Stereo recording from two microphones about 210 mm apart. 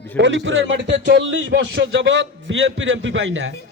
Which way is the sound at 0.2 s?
60° right (ahead or behind).